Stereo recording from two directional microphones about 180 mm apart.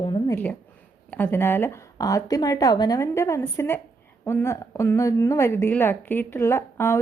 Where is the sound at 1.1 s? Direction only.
10° left (ahead or behind).